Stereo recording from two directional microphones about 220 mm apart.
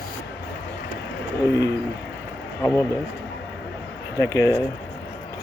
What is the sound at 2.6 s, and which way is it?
Speech, 10° left (ahead or behind).